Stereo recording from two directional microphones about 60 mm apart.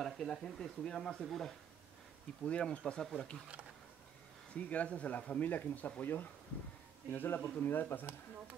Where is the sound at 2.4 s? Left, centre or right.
Centre.